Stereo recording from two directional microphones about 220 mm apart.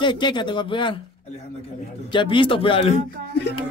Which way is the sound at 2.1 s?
25° left (ahead or behind).